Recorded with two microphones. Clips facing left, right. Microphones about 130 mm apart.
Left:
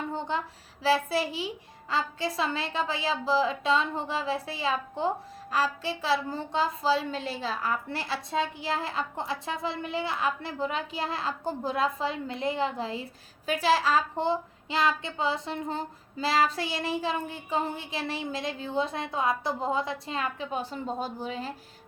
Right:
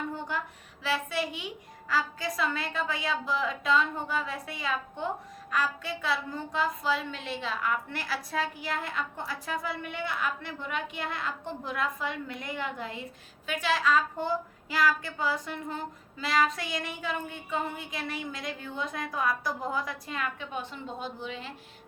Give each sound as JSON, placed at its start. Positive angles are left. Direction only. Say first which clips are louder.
{"t": 0.1, "sound": "a child's voice", "louder": "left 3 dB", "side_deg": 25}